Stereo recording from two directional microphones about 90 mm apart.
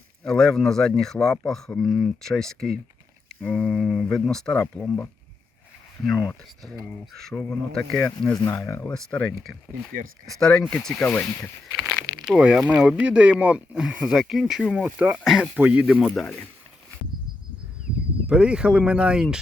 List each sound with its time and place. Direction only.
0.3 s speech: 5° left (ahead or behind)
3.7 s speech: centre (ahead or behind)
6.1 s speech: centre (ahead or behind)
8.5 s speech: 35° left (ahead or behind)
8.9 s speech: 10° left (ahead or behind)
11.7 s speech: 20° right (ahead or behind)
11.9 s a sound: centre (ahead or behind)
12.4 s speech: 15° right (ahead or behind)
14.7 s speech: 15° right (ahead or behind)
15.2 s speech: 5° right (ahead or behind)
15.5 s speech: 15° right (ahead or behind)
18.3 s speech: 10° right (ahead or behind)